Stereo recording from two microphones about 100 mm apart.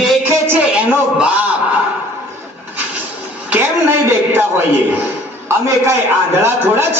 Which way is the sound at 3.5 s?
20° right (ahead or behind).